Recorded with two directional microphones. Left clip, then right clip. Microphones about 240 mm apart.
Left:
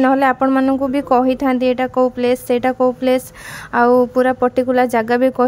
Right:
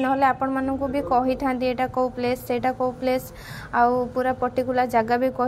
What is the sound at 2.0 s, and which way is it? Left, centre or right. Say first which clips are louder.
Speech: left 8 dB; left.